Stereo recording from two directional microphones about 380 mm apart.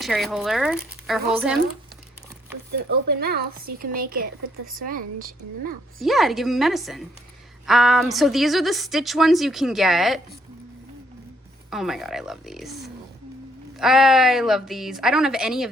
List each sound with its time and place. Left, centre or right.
0.0 s a woman's voice: centre
3.1 s speech: right
6.0 s a woman's voice: centre
11.7 s a woman's voice: centre